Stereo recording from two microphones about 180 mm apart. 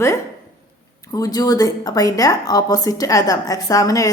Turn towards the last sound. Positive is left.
turn(degrees=20)  # may be behind; listen again after turning